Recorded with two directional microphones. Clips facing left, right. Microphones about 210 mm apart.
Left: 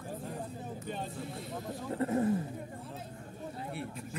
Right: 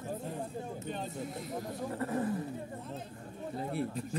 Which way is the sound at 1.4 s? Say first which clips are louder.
Right 3 dB; 25° left (ahead or behind).